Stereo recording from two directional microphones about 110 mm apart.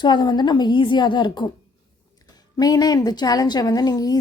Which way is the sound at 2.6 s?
35° left (ahead or behind).